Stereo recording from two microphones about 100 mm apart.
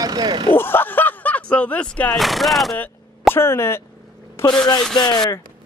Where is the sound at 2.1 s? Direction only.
Centre (ahead or behind).